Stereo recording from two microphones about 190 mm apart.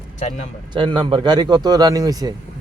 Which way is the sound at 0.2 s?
35° left (ahead or behind).